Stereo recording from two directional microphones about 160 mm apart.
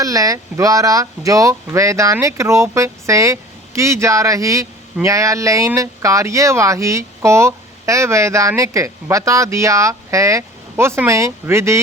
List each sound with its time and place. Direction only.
0.0 s speech: 20° right (ahead or behind)